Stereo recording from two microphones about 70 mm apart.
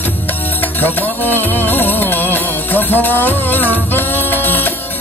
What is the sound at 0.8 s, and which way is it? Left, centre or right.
Music, left.